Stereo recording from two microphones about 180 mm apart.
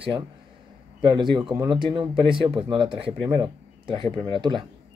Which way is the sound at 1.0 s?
25° right (ahead or behind).